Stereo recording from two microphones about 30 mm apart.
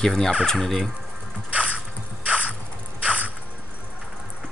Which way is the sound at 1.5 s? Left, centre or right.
Right.